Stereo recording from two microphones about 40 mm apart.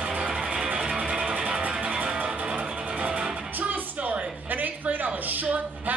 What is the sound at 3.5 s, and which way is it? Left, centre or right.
Music, right.